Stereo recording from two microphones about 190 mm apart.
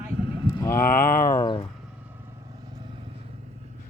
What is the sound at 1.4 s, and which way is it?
Speech, 25° left (ahead or behind).